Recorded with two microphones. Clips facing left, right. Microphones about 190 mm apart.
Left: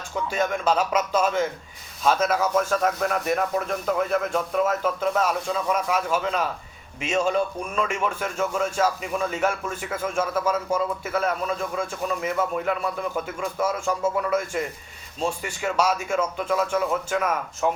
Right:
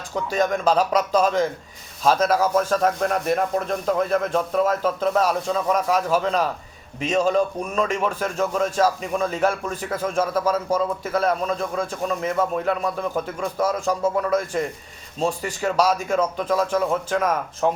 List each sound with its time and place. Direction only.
0.3 s a man's voice: 40° right (ahead or behind)